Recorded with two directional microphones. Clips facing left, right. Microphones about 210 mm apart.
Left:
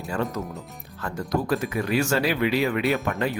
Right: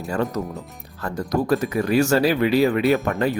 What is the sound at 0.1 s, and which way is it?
Speech, 40° right (ahead or behind).